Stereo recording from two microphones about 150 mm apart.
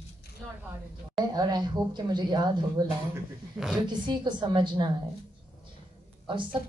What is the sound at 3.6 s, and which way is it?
Speech, 5° right (ahead or behind).